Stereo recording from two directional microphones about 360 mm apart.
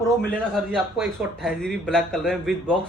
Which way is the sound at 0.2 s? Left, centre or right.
Centre.